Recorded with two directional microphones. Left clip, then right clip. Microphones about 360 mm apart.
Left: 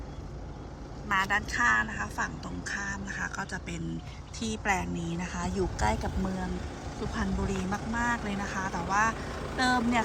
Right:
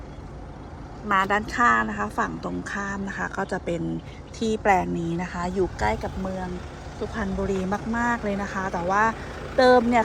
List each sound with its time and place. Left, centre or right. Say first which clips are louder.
1.0 s speech: right 6 dB; centre
9.1 s vehicle: right 2 dB; left
9.6 s speech: right 11 dB; centre